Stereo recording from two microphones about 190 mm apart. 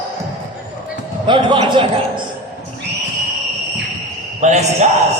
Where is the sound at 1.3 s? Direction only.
25° right (ahead or behind).